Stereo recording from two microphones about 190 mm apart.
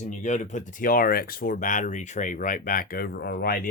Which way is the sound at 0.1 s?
40° left (ahead or behind).